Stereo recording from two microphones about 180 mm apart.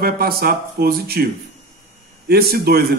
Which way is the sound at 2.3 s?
60° right (ahead or behind).